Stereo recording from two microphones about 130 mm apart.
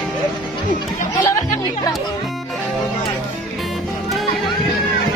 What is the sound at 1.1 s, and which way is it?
Music, 25° left (ahead or behind).